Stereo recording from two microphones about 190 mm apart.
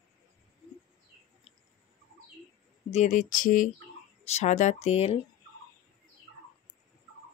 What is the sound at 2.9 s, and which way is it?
Speech, 40° left (ahead or behind).